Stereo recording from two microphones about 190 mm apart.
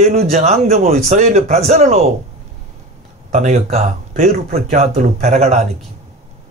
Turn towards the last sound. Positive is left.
turn(degrees=-35)  # may be behind; listen again after turning